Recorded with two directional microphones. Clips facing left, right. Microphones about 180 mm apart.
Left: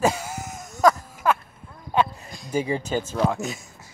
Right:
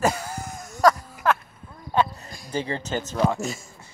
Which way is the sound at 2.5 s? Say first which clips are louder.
Left 3 dB; 10° left (ahead or behind).